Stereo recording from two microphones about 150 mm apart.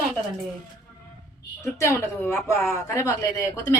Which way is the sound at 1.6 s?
15° left (ahead or behind).